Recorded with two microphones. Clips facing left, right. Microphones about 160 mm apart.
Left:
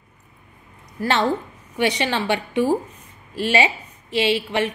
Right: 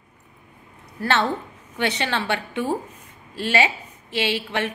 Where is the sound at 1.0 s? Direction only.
15° left (ahead or behind).